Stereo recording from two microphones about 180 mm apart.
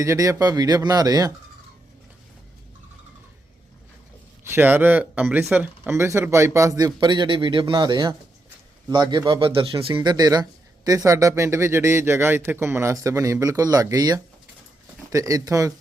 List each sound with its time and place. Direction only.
0.0 s speech: 15° right (ahead or behind)
4.4 s speech: 10° right (ahead or behind)